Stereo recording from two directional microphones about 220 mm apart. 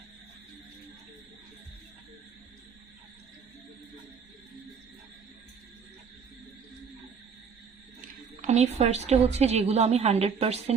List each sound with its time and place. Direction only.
8.4 s a woman's voice: 30° right (ahead or behind)